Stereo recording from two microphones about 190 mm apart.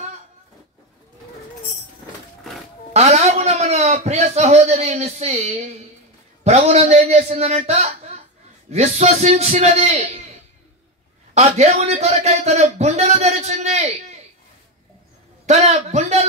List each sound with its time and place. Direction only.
2.9 s a sound: 35° right (ahead or behind)
6.4 s a man's voice: 35° right (ahead or behind)
11.3 s a man's voice: 35° right (ahead or behind)
15.4 s a man's voice: 35° right (ahead or behind)